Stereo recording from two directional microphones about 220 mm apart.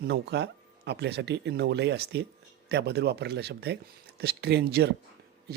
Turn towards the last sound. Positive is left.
turn(degrees=-50)  # may be behind; listen again after turning